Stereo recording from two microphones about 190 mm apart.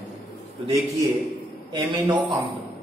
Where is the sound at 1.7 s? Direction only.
25° right (ahead or behind).